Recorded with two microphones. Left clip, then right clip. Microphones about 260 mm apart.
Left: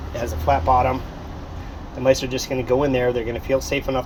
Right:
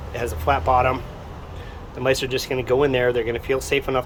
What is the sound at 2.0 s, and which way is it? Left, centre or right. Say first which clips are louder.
Speech: left 2 dB; centre.